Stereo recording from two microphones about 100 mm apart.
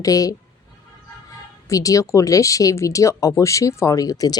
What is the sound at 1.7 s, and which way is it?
Speech, 35° left (ahead or behind).